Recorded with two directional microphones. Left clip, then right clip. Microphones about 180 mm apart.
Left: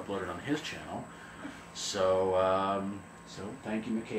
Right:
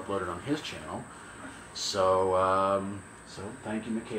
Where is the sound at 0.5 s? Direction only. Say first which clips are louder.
Right 1 dB; 5° left (ahead or behind).